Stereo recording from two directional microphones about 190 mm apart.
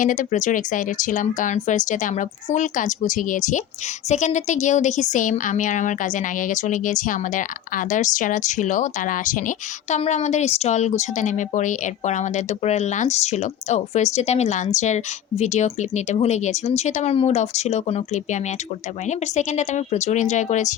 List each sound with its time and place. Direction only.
0.0 s speech: 40° left (ahead or behind)